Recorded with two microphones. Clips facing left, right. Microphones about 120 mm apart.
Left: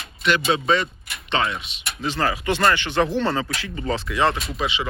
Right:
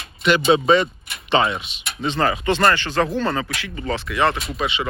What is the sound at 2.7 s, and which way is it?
Speech, 20° left (ahead or behind).